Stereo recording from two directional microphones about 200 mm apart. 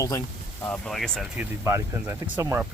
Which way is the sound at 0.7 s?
Centre (ahead or behind).